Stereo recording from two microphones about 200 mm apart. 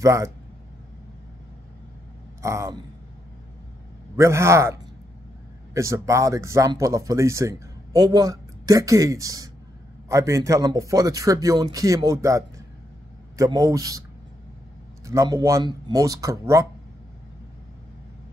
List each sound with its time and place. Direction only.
0.0 s speech: 15° right (ahead or behind)
2.4 s speech: 15° right (ahead or behind)
4.2 s speech: 15° right (ahead or behind)
5.8 s speech: 15° right (ahead or behind)
15.0 s speech: 15° right (ahead or behind)